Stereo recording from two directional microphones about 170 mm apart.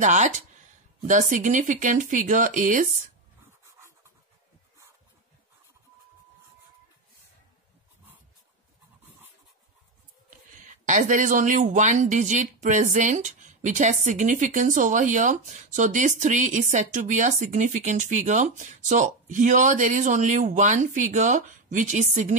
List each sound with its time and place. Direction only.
0.0 s speech: 45° right (ahead or behind)
10.6 s speech: 50° right (ahead or behind)